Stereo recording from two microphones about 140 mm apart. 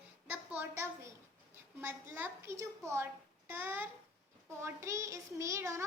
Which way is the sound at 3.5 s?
15° right (ahead or behind).